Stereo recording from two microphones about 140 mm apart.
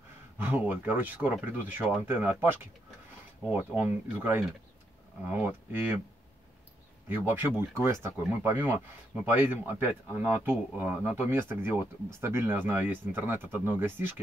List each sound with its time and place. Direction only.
0.4 s speech: 15° right (ahead or behind)
3.8 s speech: 15° right (ahead or behind)
7.1 s speech: 15° right (ahead or behind)